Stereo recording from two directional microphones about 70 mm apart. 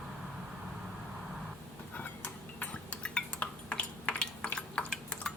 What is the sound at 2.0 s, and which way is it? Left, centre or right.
Cutlery, left.